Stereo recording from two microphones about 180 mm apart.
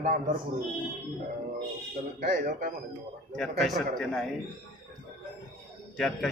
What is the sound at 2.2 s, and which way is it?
Speech, 55° right (ahead or behind).